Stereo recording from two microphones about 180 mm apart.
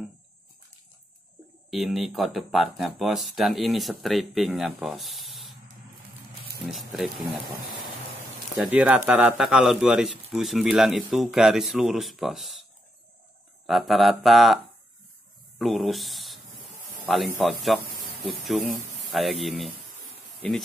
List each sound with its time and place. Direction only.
1.7 s speech: centre (ahead or behind)
8.5 s speech: 5° right (ahead or behind)
13.7 s speech: centre (ahead or behind)
15.6 s speech: centre (ahead or behind)